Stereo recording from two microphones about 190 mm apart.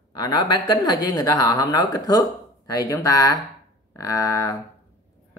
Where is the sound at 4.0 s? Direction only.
15° left (ahead or behind).